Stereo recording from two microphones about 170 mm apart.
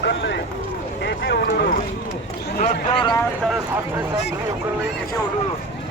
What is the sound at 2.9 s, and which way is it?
Speech, 25° left (ahead or behind).